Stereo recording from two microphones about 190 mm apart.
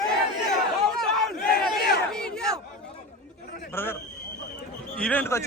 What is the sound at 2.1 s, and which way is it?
Battle cry, 5° left (ahead or behind).